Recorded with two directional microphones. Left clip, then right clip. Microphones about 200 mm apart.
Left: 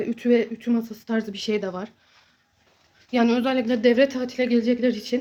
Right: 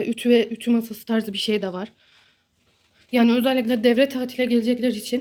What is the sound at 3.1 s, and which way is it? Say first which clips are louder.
Speech: right 2 dB; 5° right (ahead or behind).